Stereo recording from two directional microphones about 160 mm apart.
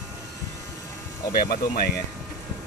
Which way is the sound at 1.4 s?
70° left (ahead or behind).